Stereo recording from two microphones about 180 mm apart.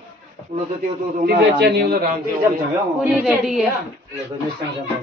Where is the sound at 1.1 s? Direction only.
60° right (ahead or behind).